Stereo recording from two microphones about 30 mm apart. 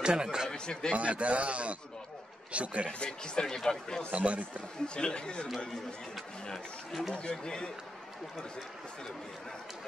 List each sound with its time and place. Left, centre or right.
0.0 s speech: right
0.5 s a sound: left
0.9 s a man's voice: right
3.1 s speech: left
4.1 s a man's voice: right
4.8 s a man's voice: left
6.9 s speech: centre
7.2 s a man's voice: left